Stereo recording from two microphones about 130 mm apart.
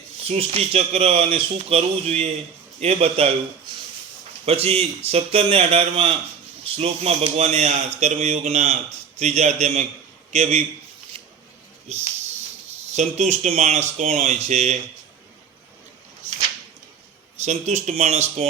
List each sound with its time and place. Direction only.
0.3 s speech: 50° right (ahead or behind)
4.4 s speech: 50° right (ahead or behind)
11.1 s a sound: 50° right (ahead or behind)
11.9 s speech: 55° right (ahead or behind)
17.4 s speech: 60° right (ahead or behind)